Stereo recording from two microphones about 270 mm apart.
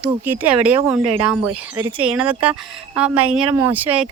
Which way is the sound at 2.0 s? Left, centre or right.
Centre.